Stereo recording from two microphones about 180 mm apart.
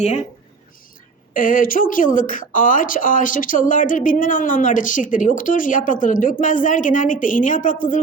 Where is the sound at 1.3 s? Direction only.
50° left (ahead or behind).